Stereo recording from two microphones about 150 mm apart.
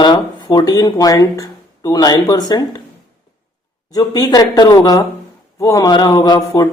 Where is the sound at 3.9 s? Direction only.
25° left (ahead or behind).